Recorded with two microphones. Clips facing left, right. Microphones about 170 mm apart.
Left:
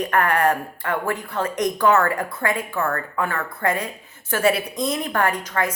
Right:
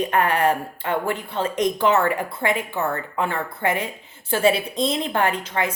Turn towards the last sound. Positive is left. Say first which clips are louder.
# even
turn(degrees=-25)  # may be behind; listen again after turning